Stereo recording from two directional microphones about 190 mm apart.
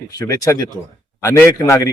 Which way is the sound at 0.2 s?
20° left (ahead or behind).